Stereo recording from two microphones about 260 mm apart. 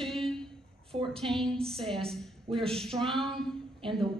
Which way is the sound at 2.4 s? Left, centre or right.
Right.